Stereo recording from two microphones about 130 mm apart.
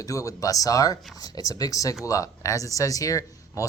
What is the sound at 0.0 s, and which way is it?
Speech, 25° left (ahead or behind).